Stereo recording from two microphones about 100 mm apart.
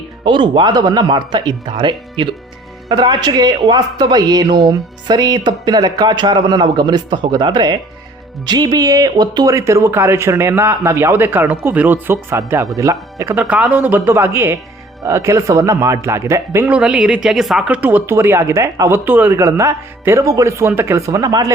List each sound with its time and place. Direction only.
0.3 s speech: 50° right (ahead or behind)
9.6 s a man's voice: 30° right (ahead or behind)
13.5 s a man's voice: 15° right (ahead or behind)
16.6 s speech: 15° right (ahead or behind)
17.7 s a man's voice: 15° right (ahead or behind); by 21.5 s 35° right (ahead or behind)